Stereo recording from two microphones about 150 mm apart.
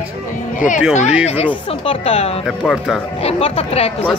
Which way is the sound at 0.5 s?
60° left (ahead or behind).